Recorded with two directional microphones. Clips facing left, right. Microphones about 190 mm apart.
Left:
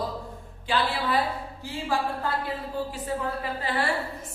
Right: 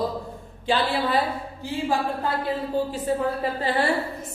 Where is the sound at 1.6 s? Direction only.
20° right (ahead or behind).